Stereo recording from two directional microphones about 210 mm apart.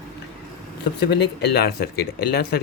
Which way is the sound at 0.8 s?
55° left (ahead or behind).